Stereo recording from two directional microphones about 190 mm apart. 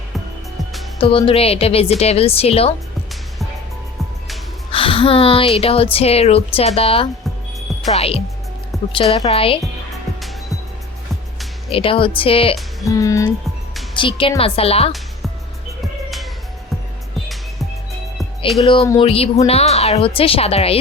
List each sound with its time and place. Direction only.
0.9 s a woman's voice: 30° left (ahead or behind)
4.7 s a woman's voice: 30° left (ahead or behind)
11.7 s speech: 30° left (ahead or behind)
12.9 s music: 15° left (ahead or behind)
13.9 s speech: 25° left (ahead or behind)
18.2 s music: centre (ahead or behind)
18.6 s a woman's voice: 30° left (ahead or behind)